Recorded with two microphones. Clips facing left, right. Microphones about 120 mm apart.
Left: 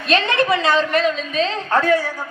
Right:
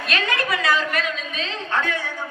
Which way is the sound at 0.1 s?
30° left (ahead or behind).